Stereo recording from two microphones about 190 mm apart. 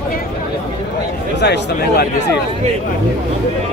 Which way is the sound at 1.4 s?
60° left (ahead or behind).